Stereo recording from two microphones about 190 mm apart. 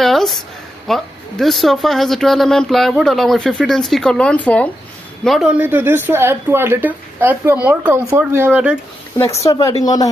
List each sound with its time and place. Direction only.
0.0 s a sound: centre (ahead or behind)
0.8 s speech: centre (ahead or behind)
9.4 s speech: 15° left (ahead or behind)